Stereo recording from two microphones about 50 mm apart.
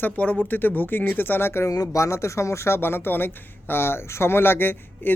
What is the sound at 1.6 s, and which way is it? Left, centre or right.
Speech, left.